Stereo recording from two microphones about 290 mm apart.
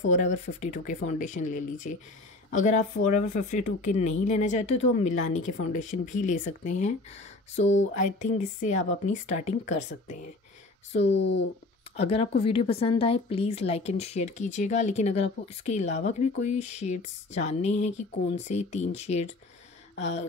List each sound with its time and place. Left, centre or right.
0.1 s speech: left
11.0 s speech: left
12.0 s speech: left